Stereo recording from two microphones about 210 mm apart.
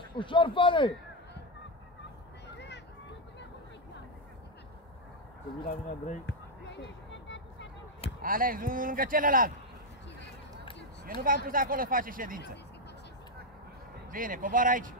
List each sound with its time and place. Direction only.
0.1 s a man's voice: 25° left (ahead or behind)
2.4 s a sound: 55° left (ahead or behind)
6.2 s a sound: 55° left (ahead or behind)
8.2 s speech: 40° right (ahead or behind)
11.1 s speech: 40° right (ahead or behind)
14.1 s speech: 40° right (ahead or behind)